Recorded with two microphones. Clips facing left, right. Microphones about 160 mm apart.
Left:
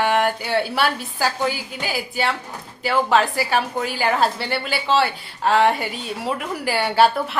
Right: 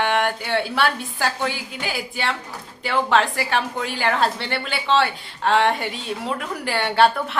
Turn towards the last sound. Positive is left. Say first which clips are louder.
# left 1 dB
turn(degrees=5)  # may be behind; listen again after turning